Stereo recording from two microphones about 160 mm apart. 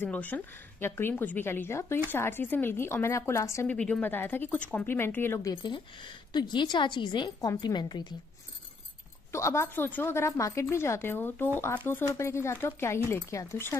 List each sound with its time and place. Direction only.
0.0 s a woman's voice: 10° left (ahead or behind)
3.6 s a woman's voice: 5° left (ahead or behind)
5.5 s a woman's voice: 30° left (ahead or behind)
9.3 s a woman's voice: 15° left (ahead or behind)